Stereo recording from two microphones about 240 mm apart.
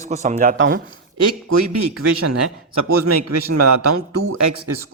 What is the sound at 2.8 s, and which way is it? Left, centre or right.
Speech, right.